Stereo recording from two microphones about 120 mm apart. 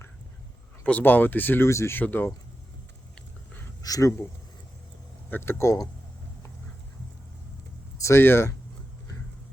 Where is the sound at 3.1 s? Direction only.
15° left (ahead or behind).